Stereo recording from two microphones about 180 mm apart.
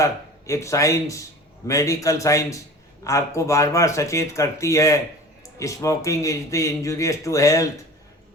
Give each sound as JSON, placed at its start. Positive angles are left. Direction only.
{"t": 0.0, "sound": "speech", "side_deg": 15}